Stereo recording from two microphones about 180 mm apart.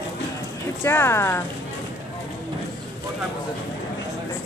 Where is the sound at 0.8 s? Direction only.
15° left (ahead or behind).